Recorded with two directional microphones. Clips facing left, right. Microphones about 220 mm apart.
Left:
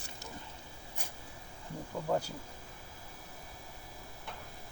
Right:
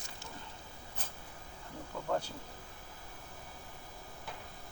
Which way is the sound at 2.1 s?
10° left (ahead or behind).